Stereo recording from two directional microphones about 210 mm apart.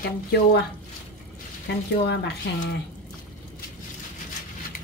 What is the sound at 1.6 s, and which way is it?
Speech, 50° left (ahead or behind).